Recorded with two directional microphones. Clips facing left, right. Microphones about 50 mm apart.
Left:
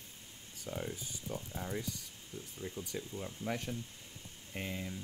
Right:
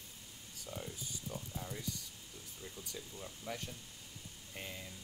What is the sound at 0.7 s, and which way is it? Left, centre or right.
Speech, left.